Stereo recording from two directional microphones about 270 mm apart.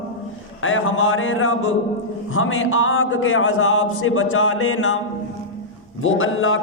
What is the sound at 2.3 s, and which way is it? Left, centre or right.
A man's voice, left.